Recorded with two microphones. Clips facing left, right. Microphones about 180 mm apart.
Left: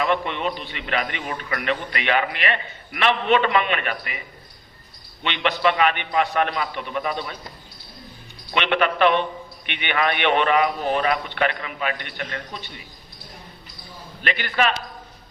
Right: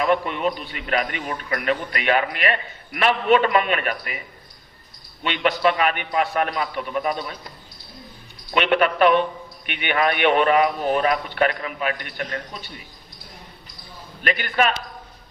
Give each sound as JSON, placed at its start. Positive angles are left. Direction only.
{"t": 0.0, "sound": "a man's voice", "side_deg": -45}
{"t": 5.2, "sound": "a man's voice", "side_deg": -45}
{"t": 8.5, "sound": "a man's voice", "side_deg": -45}
{"t": 14.2, "sound": "a man's voice", "side_deg": -45}